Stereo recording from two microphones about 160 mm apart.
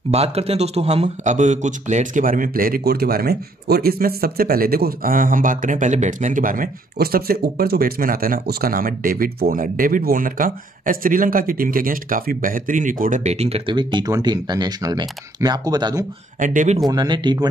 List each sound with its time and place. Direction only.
0.1 s speech: 40° right (ahead or behind); by 16.1 s 25° right (ahead or behind)
16.3 s speech: 50° right (ahead or behind)
16.8 s speech: 25° right (ahead or behind)